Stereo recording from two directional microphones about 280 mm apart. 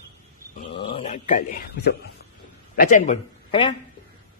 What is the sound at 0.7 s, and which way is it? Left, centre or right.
Speech, centre.